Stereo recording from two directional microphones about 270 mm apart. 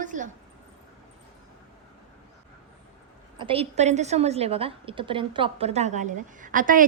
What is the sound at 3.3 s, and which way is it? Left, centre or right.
A woman's voice, centre.